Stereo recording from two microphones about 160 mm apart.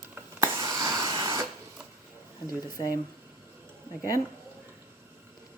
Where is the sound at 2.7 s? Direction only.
25° left (ahead or behind).